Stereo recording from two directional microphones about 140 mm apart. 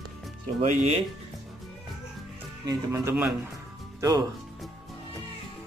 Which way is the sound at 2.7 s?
20° right (ahead or behind).